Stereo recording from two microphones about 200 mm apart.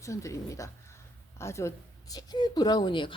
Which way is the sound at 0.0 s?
15° left (ahead or behind).